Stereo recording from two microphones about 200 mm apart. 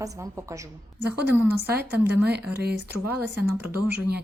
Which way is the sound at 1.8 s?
55° right (ahead or behind).